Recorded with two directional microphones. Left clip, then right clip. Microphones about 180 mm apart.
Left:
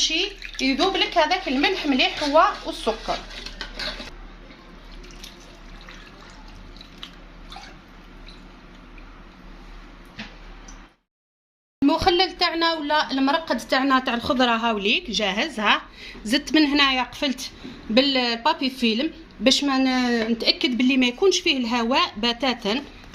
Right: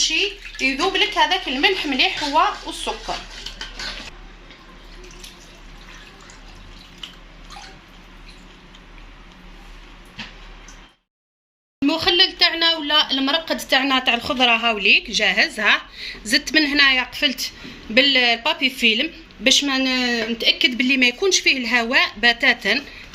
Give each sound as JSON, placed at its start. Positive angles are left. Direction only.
{"t": 0.6, "sound": "a woman's voice", "side_deg": 35}
{"t": 11.9, "sound": "a sound", "side_deg": 55}
{"t": 15.0, "sound": "a woman's voice", "side_deg": 40}